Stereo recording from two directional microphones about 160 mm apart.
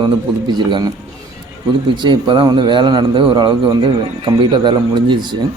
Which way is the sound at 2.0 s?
30° right (ahead or behind).